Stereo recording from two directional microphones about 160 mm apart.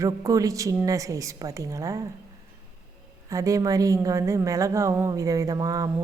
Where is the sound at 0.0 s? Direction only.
20° right (ahead or behind).